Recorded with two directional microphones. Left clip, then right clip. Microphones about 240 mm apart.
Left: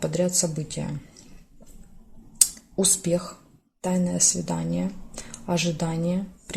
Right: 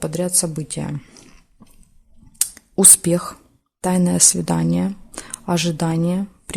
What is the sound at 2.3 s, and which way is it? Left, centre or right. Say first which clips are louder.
Whispering: right 3 dB; right.